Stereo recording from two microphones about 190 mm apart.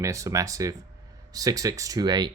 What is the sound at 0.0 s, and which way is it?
Speech, 15° right (ahead or behind).